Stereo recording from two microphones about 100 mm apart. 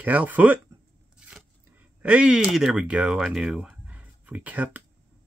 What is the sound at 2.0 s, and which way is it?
Speech, 10° right (ahead or behind).